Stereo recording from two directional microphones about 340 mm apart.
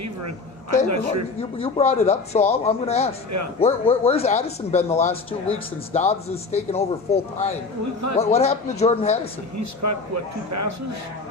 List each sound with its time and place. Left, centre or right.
0.9 s speech: right
1.4 s speech: centre
9.6 s speech: right